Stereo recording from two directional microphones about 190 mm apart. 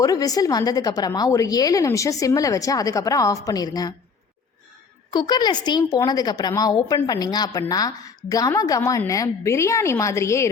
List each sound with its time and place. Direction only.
0.0 s a woman's voice: 20° left (ahead or behind)
5.1 s a woman's voice: 20° left (ahead or behind)